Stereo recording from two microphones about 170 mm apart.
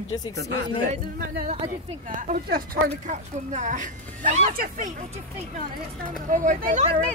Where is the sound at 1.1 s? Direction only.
55° right (ahead or behind).